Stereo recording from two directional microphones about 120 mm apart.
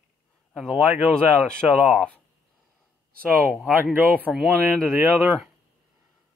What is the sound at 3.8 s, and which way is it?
Speech, 15° right (ahead or behind).